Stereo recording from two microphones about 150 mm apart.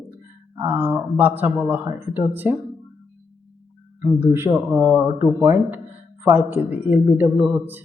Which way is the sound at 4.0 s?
15° right (ahead or behind).